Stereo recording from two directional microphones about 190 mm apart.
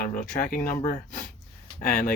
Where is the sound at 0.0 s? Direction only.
45° left (ahead or behind).